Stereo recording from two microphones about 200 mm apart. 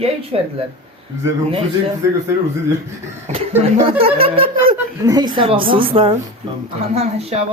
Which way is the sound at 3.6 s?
30° right (ahead or behind).